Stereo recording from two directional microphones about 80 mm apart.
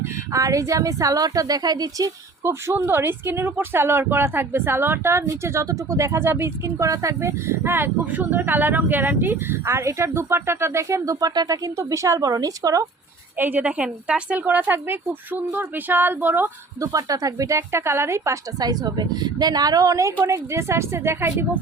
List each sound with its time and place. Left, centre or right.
0.3 s a woman's voice: right
2.4 s speech: right
6.8 s speech: right
13.4 s a woman's voice: right
16.8 s speech: right
18.6 s a woman's voice: right